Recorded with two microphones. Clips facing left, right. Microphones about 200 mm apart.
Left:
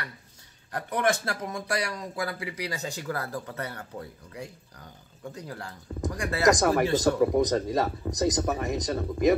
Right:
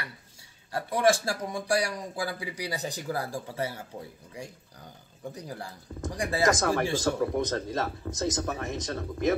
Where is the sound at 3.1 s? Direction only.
10° right (ahead or behind).